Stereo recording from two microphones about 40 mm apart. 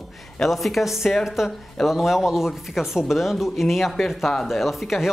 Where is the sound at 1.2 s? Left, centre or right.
Centre.